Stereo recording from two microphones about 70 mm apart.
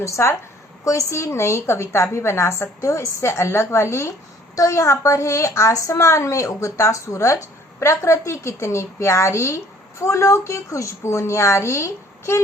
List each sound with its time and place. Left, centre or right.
0.0 s a woman's voice: left